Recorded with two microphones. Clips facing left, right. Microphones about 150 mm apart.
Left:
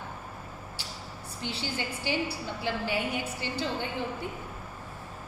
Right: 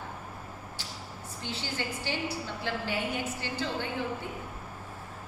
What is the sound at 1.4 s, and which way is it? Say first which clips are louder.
A woman's voice: left 1 dB; 15° left (ahead or behind).